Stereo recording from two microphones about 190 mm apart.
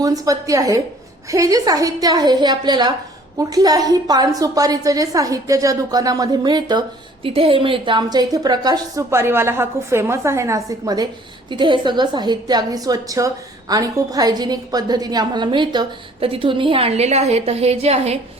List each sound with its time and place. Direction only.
0.0 s a woman's voice: 20° right (ahead or behind); by 18.2 s 35° right (ahead or behind)